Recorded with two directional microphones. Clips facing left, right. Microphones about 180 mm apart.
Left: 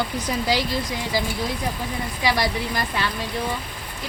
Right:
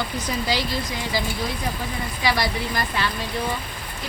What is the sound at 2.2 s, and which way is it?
Speech, 15° left (ahead or behind).